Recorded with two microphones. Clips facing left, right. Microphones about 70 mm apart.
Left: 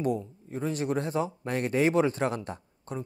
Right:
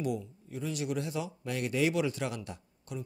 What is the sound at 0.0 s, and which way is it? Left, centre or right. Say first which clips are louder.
Speech: left 5 dB; left.